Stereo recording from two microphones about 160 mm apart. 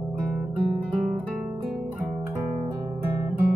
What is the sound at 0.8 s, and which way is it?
Guitar, 5° right (ahead or behind).